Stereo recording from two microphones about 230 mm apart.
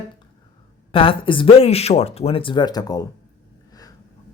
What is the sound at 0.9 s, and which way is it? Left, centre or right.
A woman's voice, left.